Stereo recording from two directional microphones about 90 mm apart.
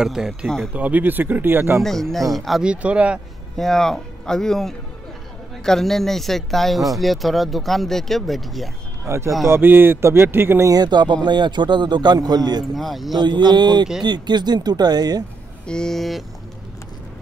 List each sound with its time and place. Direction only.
0.0 s speech: 5° right (ahead or behind)
0.7 s speech: 15° right (ahead or behind)
1.8 s speech: 5° left (ahead or behind)
2.6 s speech: 15° right (ahead or behind)
3.5 s speech: 5° left (ahead or behind)
9.0 s speech: 30° right (ahead or behind)
10.7 s a man's voice: 50° right (ahead or behind)
12.7 s speech: centre (ahead or behind)
13.2 s a man's voice: 55° right (ahead or behind)
15.6 s speech: 10° left (ahead or behind)